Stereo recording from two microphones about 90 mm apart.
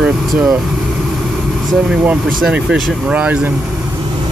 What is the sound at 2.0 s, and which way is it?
Speech, 15° right (ahead or behind).